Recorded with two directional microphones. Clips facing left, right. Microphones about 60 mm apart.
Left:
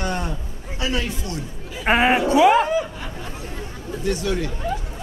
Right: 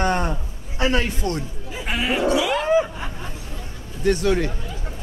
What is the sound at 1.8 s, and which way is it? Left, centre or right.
Speech, left.